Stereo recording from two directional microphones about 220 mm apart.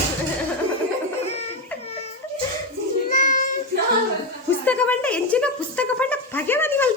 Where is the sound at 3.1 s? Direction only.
35° left (ahead or behind).